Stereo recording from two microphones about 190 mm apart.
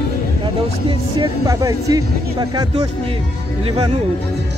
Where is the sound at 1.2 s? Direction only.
20° right (ahead or behind).